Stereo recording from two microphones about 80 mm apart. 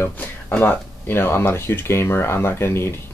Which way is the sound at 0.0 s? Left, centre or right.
Left.